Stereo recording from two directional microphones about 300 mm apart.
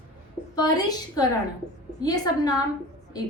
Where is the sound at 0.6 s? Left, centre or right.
Centre.